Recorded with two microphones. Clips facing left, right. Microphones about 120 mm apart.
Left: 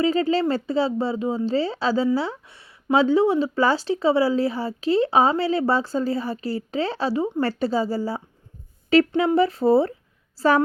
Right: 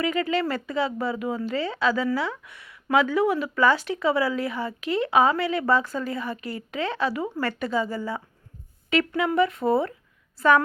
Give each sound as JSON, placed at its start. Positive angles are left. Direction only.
{"t": 0.0, "sound": "a woman's voice", "side_deg": 30}